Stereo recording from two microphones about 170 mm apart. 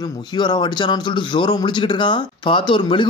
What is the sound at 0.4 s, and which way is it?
Speech, 25° left (ahead or behind).